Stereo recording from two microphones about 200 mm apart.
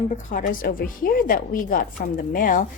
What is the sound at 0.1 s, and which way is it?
A woman's voice, 40° left (ahead or behind).